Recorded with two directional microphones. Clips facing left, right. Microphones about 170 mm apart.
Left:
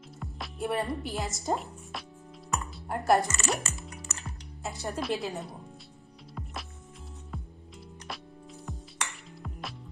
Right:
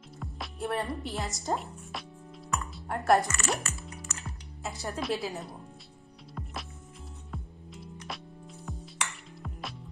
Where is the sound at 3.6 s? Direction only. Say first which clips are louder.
Even; 20° left (ahead or behind).